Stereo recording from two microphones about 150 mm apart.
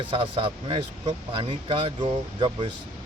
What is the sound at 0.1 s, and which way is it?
Speech, 35° right (ahead or behind).